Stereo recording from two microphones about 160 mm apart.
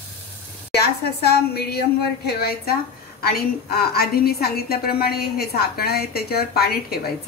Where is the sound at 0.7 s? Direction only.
85° left.